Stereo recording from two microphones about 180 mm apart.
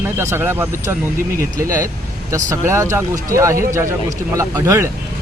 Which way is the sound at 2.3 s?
15° right (ahead or behind).